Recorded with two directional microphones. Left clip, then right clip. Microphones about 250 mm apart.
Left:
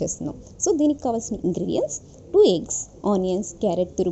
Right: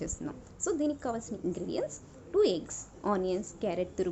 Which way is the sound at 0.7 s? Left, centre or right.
Left.